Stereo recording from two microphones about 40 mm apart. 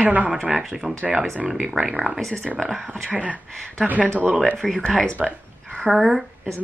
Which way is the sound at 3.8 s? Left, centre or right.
Right.